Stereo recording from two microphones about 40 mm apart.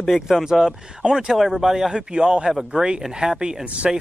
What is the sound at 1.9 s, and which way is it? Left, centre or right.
Speech, right.